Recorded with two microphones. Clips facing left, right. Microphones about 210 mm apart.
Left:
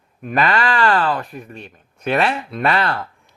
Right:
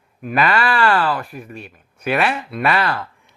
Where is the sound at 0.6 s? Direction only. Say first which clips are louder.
Even; 20° left (ahead or behind).